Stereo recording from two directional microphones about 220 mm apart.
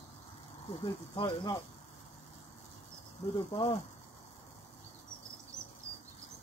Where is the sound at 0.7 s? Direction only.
20° left (ahead or behind).